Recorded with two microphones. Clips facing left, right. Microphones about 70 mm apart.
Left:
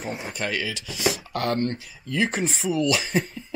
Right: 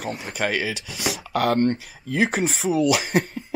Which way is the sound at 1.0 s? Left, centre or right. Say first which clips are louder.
Right 1 dB; centre.